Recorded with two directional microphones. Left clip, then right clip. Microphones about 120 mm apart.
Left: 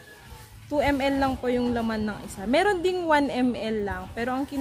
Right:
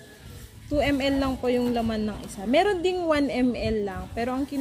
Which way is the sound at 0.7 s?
25° left (ahead or behind).